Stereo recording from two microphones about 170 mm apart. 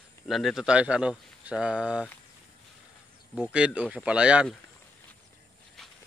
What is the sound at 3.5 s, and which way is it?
Speech, 5° right (ahead or behind).